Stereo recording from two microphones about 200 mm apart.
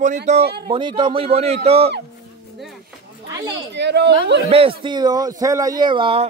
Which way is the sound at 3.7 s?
60° right (ahead or behind).